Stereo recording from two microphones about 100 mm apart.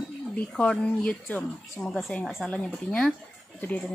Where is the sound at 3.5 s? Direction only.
15° left (ahead or behind).